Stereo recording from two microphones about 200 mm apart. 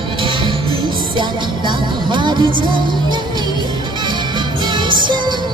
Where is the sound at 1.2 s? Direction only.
25° right (ahead or behind).